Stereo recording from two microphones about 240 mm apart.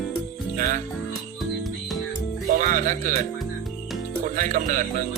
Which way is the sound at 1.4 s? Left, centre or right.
Centre.